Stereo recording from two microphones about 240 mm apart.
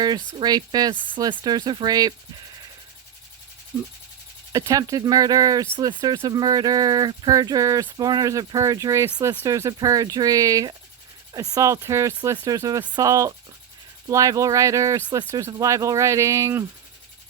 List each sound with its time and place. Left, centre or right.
0.3 s speech: centre
4.5 s speech: centre